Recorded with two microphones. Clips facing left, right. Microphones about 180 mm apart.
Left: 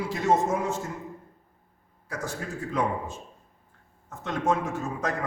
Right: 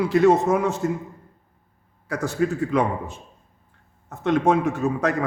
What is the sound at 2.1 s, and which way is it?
A man's voice, 70° right (ahead or behind).